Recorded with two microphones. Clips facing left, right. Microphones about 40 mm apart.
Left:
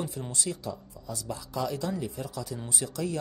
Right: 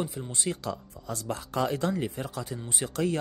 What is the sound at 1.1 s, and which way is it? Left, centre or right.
A man's voice, right.